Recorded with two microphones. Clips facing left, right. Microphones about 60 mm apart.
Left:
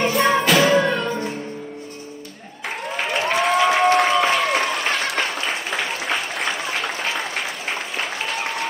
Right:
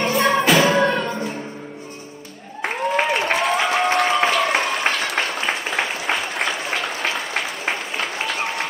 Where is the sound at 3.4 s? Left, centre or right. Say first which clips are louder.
Left 2 dB; centre.